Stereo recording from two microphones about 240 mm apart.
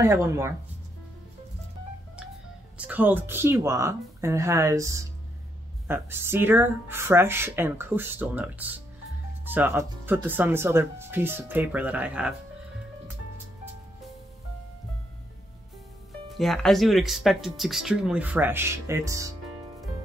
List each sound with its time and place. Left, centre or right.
0.0 s speech: centre
2.8 s speech: centre
16.3 s speech: centre